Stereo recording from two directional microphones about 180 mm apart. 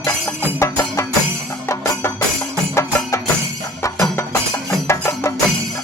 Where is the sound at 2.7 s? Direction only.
15° left (ahead or behind).